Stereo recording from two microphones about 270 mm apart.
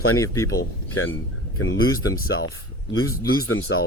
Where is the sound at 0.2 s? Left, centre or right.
Centre.